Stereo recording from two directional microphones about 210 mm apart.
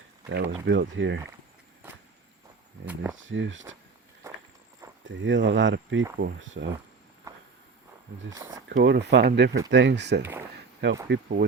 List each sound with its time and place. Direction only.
0.3 s speech: 60° right (ahead or behind)
3.2 s speech: 60° right (ahead or behind)
5.0 s speech: 60° right (ahead or behind)
7.3 s a sound: 15° right (ahead or behind)
8.3 s speech: 15° right (ahead or behind)
8.8 s speech: 55° right (ahead or behind)